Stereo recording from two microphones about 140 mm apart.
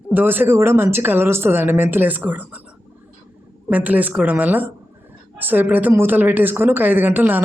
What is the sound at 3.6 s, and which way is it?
A woman's voice, 10° right (ahead or behind).